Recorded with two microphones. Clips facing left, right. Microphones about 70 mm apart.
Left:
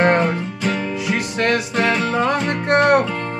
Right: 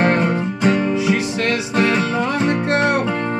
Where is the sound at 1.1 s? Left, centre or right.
Left.